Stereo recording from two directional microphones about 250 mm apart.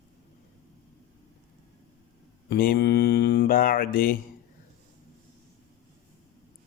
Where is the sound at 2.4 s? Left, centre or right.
Left.